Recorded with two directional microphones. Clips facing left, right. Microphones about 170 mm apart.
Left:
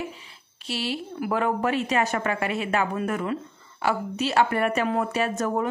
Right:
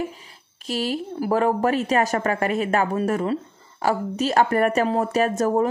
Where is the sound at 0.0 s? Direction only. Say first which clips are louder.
Right 5 dB; 40° right (ahead or behind).